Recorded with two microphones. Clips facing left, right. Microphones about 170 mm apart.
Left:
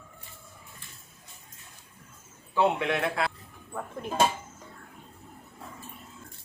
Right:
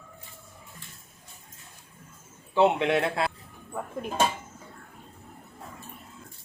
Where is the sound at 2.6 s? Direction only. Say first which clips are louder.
Right 3 dB; 25° right (ahead or behind).